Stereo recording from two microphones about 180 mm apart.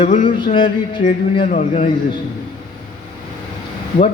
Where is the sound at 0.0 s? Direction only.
45° left (ahead or behind).